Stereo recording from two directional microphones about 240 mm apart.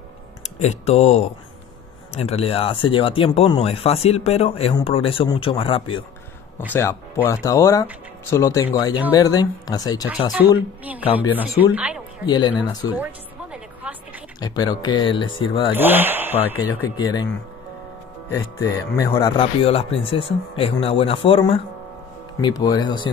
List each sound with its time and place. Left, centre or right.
0.6 s speech: left
11.3 s speech: centre
12.3 s speech: centre
12.9 s music: centre
14.4 s speech: centre
15.7 s speech: centre
16.5 s speech: centre
18.3 s speech: centre